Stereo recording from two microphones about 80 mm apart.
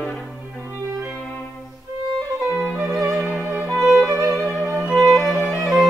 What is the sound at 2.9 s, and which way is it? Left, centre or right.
Music, centre.